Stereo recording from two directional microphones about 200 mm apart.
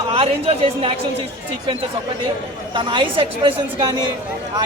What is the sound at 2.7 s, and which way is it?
A man's voice, 25° right (ahead or behind).